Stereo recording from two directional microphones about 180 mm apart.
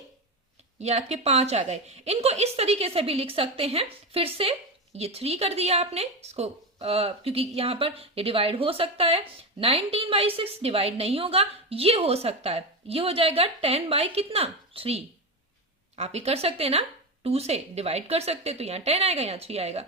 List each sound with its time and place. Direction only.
0.8 s a woman's voice: 35° right (ahead or behind)